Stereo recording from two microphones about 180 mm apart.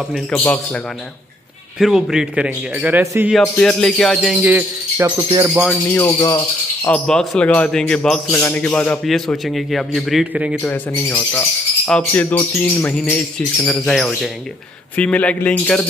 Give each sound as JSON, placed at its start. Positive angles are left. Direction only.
{"t": 0.3, "sound": "speech", "side_deg": 10}
{"t": 1.8, "sound": "a man's voice", "side_deg": 0}
{"t": 3.3, "sound": "a man's voice", "side_deg": 5}
{"t": 5.9, "sound": "speech", "side_deg": 15}
{"t": 7.1, "sound": "a man's voice", "side_deg": 5}
{"t": 10.7, "sound": "a man's voice", "side_deg": 10}